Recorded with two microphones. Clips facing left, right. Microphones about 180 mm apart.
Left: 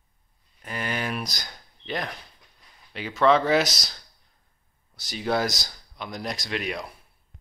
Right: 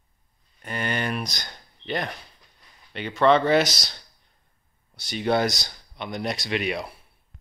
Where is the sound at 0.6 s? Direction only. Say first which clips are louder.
Right 2 dB; centre (ahead or behind).